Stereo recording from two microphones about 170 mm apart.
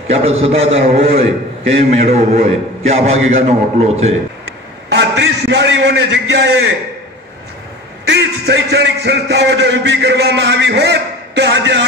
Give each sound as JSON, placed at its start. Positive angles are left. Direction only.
{"t": 0.1, "sound": "a man's voice", "side_deg": -35}
{"t": 4.9, "sound": "a man's voice", "side_deg": -90}
{"t": 8.0, "sound": "a man's voice", "side_deg": -85}